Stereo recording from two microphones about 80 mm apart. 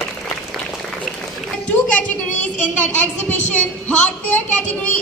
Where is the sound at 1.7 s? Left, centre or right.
Centre.